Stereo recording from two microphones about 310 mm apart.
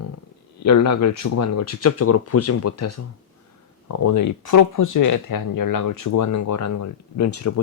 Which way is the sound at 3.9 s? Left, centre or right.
Left.